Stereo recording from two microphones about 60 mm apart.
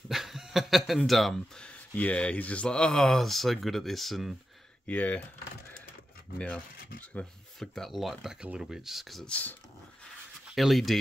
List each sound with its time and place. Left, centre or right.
0.1 s speech: centre
1.6 s speech: left; by 4.4 s centre
4.8 s speech: left
6.3 s speech: centre
7.5 s speech: centre
10.5 s speech: centre